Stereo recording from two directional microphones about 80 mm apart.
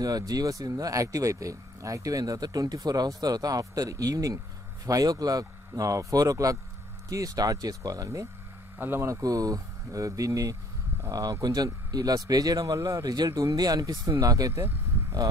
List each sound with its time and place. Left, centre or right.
0.3 s speech: right
8.7 s speech: right
14.5 s vehicle: right